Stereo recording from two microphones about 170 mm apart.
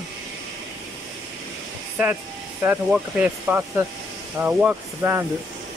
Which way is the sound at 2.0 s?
10° right (ahead or behind).